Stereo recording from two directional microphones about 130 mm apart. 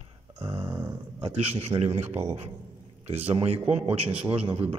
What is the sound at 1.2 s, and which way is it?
Speech, 50° right (ahead or behind).